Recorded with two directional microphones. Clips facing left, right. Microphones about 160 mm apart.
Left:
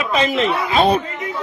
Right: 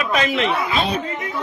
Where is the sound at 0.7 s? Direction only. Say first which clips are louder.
Left 7 dB; 55° left (ahead or behind).